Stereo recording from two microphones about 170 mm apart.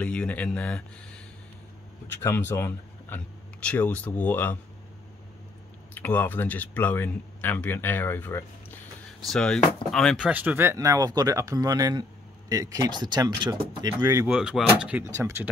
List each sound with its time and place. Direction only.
0.0 s speech: 10° left (ahead or behind)
5.9 s speech: 10° left (ahead or behind); by 13.6 s 25° right (ahead or behind)
14.2 s speech: 5° right (ahead or behind)
15.1 s speech: 15° right (ahead or behind)